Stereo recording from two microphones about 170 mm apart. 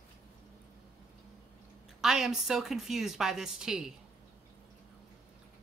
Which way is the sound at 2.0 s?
Centre (ahead or behind).